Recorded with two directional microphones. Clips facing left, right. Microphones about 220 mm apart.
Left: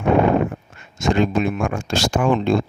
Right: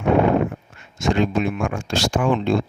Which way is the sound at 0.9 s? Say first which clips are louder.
Left 1 dB; 45° left (ahead or behind).